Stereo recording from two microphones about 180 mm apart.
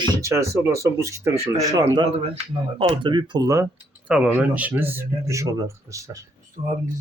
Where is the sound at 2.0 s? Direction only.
30° right (ahead or behind).